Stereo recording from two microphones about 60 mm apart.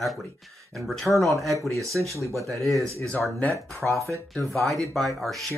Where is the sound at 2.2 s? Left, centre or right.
Right.